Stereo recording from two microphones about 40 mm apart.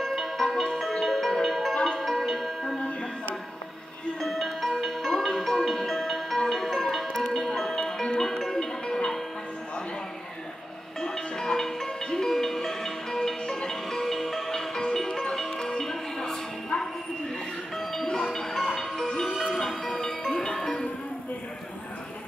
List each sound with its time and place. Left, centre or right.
0.0 s music: centre
4.2 s music: centre
11.0 s music: centre
15.5 s music: left
15.8 s music: centre